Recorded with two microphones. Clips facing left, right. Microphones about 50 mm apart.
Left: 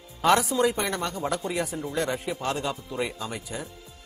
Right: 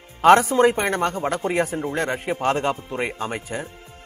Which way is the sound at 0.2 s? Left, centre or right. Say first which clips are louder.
Right 7 dB; right.